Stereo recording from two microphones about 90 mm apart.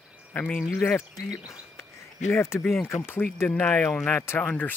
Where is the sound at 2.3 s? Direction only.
25° left (ahead or behind).